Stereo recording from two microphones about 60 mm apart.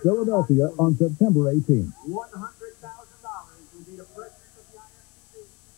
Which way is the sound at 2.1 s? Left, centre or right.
Centre.